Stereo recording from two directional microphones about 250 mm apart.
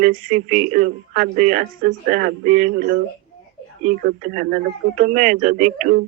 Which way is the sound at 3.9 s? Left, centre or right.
Right.